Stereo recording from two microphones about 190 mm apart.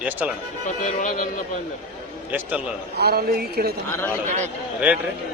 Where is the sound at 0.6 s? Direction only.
40° left (ahead or behind).